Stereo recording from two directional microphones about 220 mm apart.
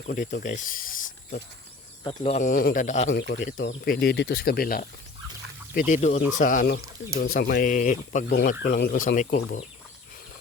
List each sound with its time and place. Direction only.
0.1 s speech: 40° left (ahead or behind)
2.0 s speech: 30° left (ahead or behind)
3.2 s speech: 45° left (ahead or behind)